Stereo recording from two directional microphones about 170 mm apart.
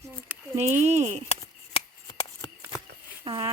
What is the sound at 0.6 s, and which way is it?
Speech, 40° right (ahead or behind).